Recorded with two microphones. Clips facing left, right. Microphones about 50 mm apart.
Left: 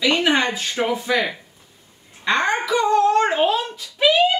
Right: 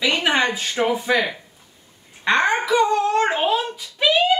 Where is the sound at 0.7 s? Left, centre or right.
Centre.